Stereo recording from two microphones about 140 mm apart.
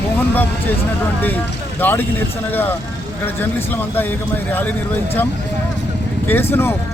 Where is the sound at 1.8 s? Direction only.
15° left (ahead or behind).